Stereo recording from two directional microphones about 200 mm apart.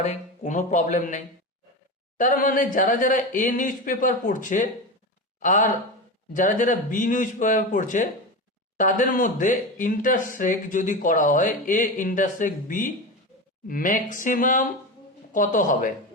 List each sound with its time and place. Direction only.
0.0 s speech: 35° left (ahead or behind)